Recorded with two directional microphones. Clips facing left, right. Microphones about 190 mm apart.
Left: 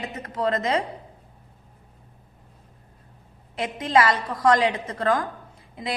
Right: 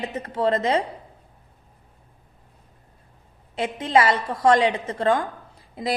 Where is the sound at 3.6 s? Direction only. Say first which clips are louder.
Right 1 dB; 25° right (ahead or behind).